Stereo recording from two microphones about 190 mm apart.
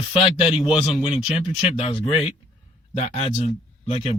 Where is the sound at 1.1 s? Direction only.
30° left (ahead or behind).